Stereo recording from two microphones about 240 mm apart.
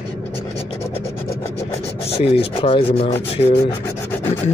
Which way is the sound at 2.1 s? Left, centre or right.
Left.